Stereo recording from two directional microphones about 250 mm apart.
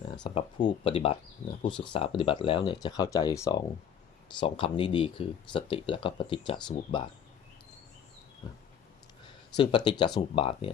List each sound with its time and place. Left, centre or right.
0.2 s speech: left
9.6 s speech: centre